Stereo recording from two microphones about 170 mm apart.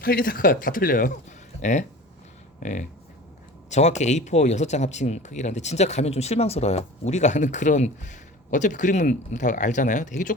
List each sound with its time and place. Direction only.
0.0 s speech: 60° left (ahead or behind)
2.6 s speech: 45° left (ahead or behind)